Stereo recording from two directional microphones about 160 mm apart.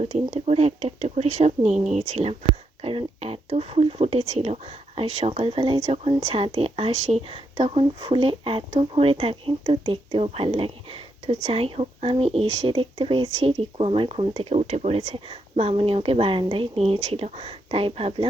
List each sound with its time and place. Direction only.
0.0 s speech: 40° right (ahead or behind)